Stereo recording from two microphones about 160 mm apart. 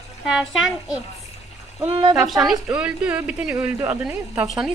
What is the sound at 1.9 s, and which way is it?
Speech, 35° right (ahead or behind).